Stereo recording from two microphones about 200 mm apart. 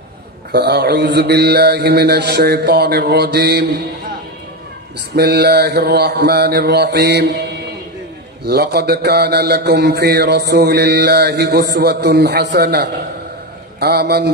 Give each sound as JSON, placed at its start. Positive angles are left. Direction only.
{"t": 0.5, "sound": "mantra", "side_deg": -55}
{"t": 5.1, "sound": "mantra", "side_deg": -55}
{"t": 8.5, "sound": "mantra", "side_deg": -55}